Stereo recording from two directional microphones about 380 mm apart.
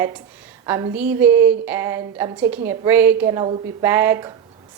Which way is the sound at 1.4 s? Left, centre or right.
Right.